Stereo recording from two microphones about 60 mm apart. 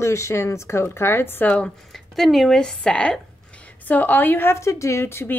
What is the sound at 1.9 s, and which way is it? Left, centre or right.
Speech, centre.